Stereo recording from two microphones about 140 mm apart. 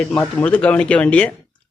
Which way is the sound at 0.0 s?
5° left (ahead or behind).